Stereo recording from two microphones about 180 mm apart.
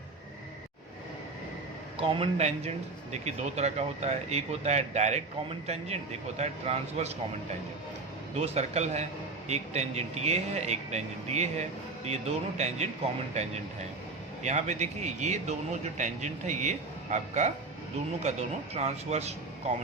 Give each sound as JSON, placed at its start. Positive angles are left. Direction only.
{"t": 2.0, "sound": "a man's voice", "side_deg": -30}
{"t": 8.4, "sound": "a man's voice", "side_deg": -35}
{"t": 14.4, "sound": "a man's voice", "side_deg": -40}